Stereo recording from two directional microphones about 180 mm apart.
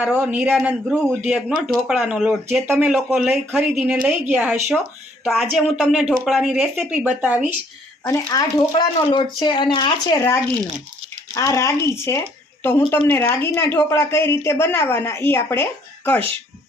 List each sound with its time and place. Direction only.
0.0 s a woman's voice: 5° right (ahead or behind)
8.0 s a woman's voice: 20° left (ahead or behind)